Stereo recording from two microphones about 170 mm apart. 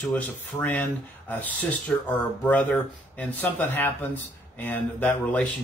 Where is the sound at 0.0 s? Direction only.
10° left (ahead or behind).